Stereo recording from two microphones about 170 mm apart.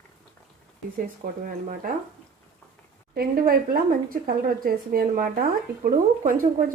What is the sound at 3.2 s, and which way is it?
A woman's voice, 55° right (ahead or behind).